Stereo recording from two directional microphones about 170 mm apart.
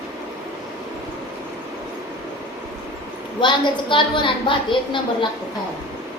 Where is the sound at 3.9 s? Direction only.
30° left (ahead or behind).